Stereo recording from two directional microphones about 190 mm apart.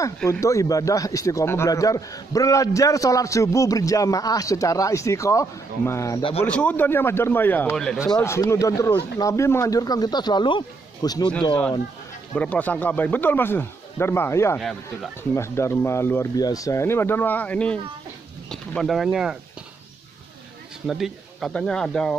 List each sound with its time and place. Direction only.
0.0 s speech: 15° left (ahead or behind)
8.0 s speech: 15° left (ahead or behind)
12.4 s speech: 10° left (ahead or behind)
14.6 s speech: centre (ahead or behind)
15.3 s speech: 15° left (ahead or behind); by 19.3 s centre (ahead or behind)
20.8 s speech: centre (ahead or behind)